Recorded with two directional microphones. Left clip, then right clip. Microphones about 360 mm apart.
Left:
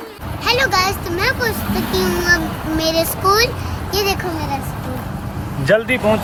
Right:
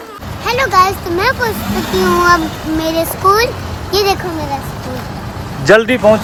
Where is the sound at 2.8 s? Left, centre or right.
Centre.